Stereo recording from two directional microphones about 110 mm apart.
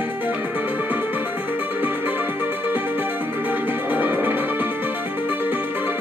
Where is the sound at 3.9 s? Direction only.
15° right (ahead or behind).